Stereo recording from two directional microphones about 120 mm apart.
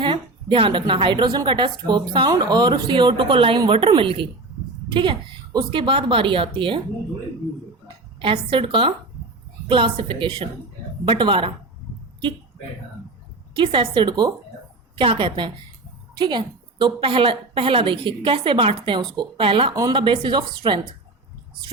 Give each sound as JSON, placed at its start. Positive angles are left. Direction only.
{"t": 0.0, "sound": "a woman's voice", "side_deg": -45}
{"t": 8.2, "sound": "a woman's voice", "side_deg": -45}
{"t": 13.6, "sound": "a woman's voice", "side_deg": -45}
{"t": 14.9, "sound": "a woman's voice", "side_deg": -45}